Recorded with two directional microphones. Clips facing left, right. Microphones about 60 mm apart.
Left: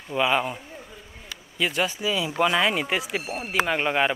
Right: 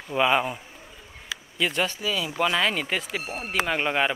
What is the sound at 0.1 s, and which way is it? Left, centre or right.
Speech, centre.